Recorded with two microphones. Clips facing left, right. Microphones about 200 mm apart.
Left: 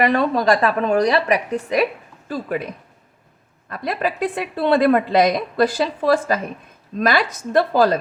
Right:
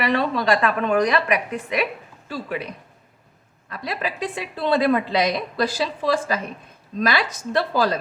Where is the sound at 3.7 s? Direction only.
50° left (ahead or behind).